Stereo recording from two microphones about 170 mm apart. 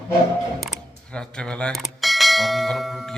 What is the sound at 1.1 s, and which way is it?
Speech, 5° left (ahead or behind).